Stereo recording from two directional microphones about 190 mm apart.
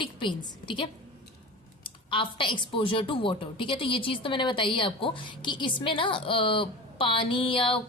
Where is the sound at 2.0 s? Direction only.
25° left (ahead or behind).